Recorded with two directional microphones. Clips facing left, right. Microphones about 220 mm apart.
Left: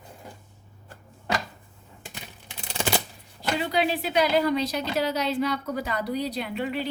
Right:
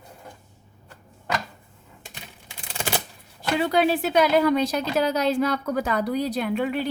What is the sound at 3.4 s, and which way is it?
Speech, 50° right (ahead or behind).